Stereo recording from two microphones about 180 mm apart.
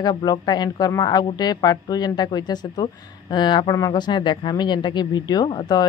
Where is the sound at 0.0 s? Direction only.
25° left (ahead or behind).